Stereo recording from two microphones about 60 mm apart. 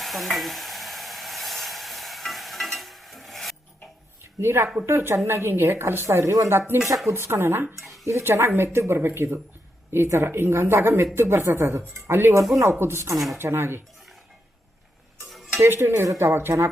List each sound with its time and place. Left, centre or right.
0.0 s stir: centre
4.2 s a sound: right
4.9 s a woman's voice: right
6.5 s a woman's voice: right
7.8 s a sound: centre
8.0 s a woman's voice: right
13.1 s speech: centre
13.4 s a woman's voice: right
15.5 s a woman's voice: right
16.0 s a woman's voice: right